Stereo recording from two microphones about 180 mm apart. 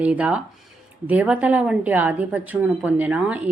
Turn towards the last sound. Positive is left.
turn(degrees=-5)  # may be behind; listen again after turning